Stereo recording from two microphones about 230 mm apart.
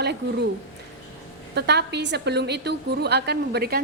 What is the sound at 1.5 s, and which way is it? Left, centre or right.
A woman's voice, right.